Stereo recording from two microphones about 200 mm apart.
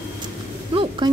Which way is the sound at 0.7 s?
25° right (ahead or behind).